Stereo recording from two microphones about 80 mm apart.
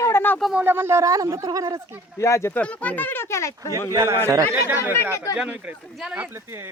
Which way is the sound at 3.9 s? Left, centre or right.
Right.